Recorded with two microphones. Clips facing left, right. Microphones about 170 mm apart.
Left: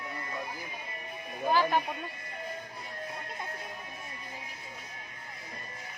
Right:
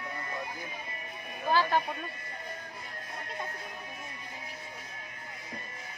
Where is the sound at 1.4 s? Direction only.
15° left (ahead or behind).